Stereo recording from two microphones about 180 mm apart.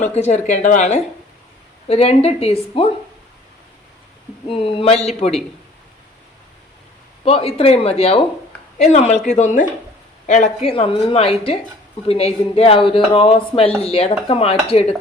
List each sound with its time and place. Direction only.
0.0 s speech: 40° left (ahead or behind)
4.4 s speech: 30° left (ahead or behind)
7.3 s speech: 30° left (ahead or behind)